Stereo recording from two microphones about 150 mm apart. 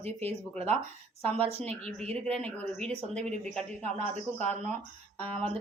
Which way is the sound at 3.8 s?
50° right (ahead or behind).